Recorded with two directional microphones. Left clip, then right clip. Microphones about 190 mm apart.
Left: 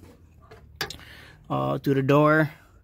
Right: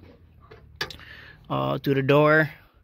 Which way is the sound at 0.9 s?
20° left (ahead or behind).